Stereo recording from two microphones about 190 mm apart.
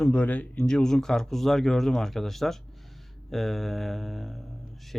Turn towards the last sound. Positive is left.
turn(degrees=0)  # may be behind; listen again after turning